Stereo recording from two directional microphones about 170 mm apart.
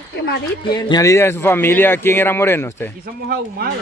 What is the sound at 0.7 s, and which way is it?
Speech, 25° left (ahead or behind).